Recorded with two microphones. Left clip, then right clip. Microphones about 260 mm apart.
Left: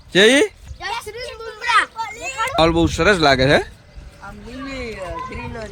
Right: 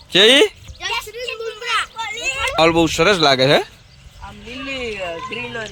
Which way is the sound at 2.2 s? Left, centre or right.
Centre.